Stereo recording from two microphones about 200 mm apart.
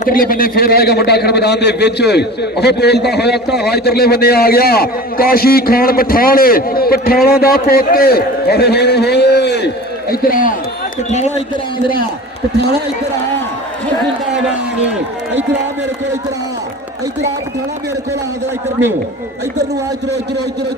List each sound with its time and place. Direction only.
0.0 s a man's voice: 45° left (ahead or behind)
10.1 s a man's voice: 45° left (ahead or behind)
11.1 s a man's voice: 35° left (ahead or behind)
12.5 s a man's voice: 50° right (ahead or behind)